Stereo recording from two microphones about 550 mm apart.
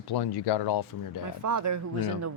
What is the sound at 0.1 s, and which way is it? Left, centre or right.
Speech, left.